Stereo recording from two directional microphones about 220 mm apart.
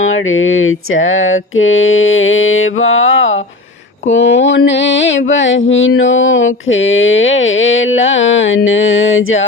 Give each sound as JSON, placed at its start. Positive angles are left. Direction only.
{"t": 0.0, "sound": "mantra", "side_deg": 65}